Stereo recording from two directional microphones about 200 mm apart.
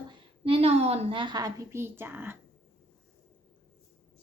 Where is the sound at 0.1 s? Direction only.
25° right (ahead or behind); by 2.4 s 10° right (ahead or behind).